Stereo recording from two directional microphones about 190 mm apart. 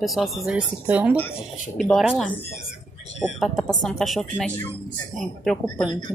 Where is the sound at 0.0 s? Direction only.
Centre (ahead or behind).